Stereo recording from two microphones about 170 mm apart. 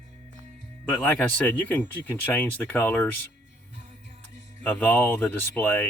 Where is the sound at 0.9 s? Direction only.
10° left (ahead or behind).